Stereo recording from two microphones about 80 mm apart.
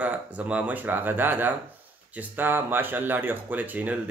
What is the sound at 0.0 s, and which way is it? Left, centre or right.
Speech, centre.